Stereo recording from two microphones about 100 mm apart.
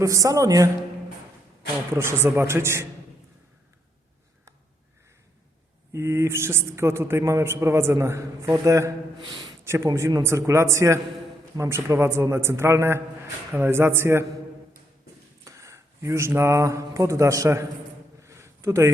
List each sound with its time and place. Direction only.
0.0 s a man's voice: 35° right (ahead or behind)
2.0 s a man's voice: 25° right (ahead or behind)
5.9 s a man's voice: 25° right (ahead or behind)
9.1 s a sound: 45° right (ahead or behind)
9.6 s a man's voice: 30° right (ahead or behind)
15.4 s speech: 30° right (ahead or behind)
18.2 s a sound: 30° right (ahead or behind)